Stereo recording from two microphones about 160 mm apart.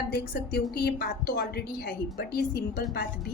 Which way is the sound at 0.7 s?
85° left.